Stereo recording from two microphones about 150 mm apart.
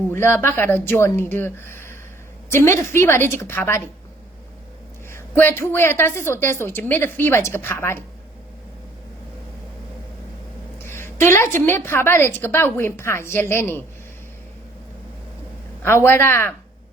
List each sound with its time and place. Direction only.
0.1 s a woman's voice: 15° left (ahead or behind)
5.1 s a woman's voice: 15° left (ahead or behind)
10.8 s a woman's voice: 15° left (ahead or behind)
16.0 s a woman's voice: 15° left (ahead or behind)